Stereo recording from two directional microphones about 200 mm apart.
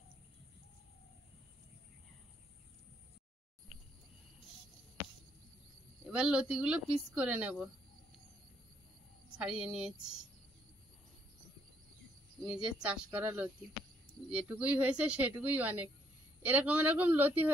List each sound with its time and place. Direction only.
3.7 s cricket: centre (ahead or behind)
6.0 s speech: 5° right (ahead or behind)
9.4 s speech: 5° right (ahead or behind)
12.4 s speech: 5° right (ahead or behind)